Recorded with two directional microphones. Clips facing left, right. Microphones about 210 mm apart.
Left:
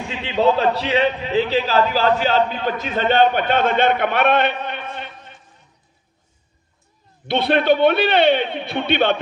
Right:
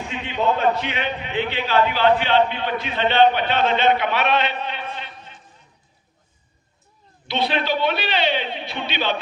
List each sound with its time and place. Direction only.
0.1 s a man's voice: 30° left (ahead or behind); by 5.4 s 55° left (ahead or behind)
7.3 s a man's voice: 55° left (ahead or behind)